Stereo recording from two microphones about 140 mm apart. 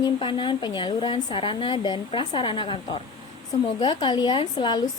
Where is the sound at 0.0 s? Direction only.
40° left (ahead or behind).